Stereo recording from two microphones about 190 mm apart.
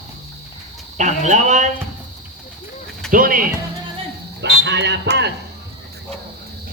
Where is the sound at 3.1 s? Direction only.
45° right (ahead or behind).